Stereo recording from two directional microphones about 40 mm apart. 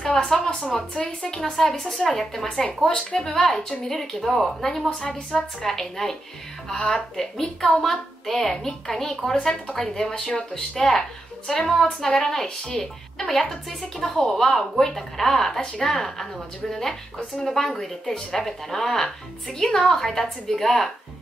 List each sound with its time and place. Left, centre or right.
0.0 s a woman's voice: centre
1.4 s a woman's voice: centre
10.1 s a woman's voice: centre
17.6 s a woman's voice: centre